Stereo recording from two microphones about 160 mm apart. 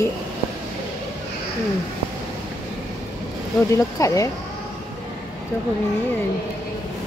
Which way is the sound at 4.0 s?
20° left (ahead or behind).